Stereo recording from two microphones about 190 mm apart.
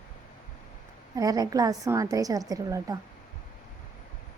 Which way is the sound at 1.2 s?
20° right (ahead or behind).